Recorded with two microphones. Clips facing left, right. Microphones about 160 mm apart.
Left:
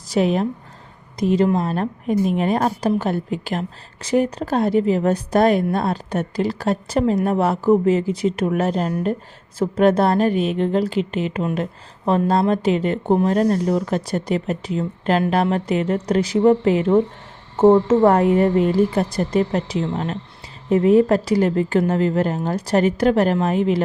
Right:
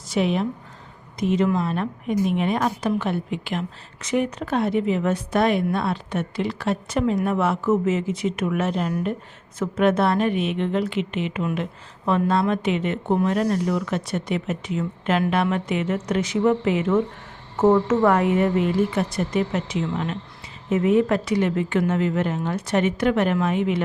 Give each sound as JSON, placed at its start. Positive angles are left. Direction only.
{"t": 0.1, "sound": "a woman's voice", "side_deg": 40}